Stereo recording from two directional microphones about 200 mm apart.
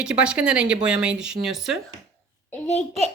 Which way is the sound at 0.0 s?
5° right (ahead or behind).